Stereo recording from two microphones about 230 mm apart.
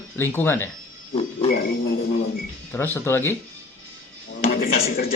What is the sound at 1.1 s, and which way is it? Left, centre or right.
Speech, left.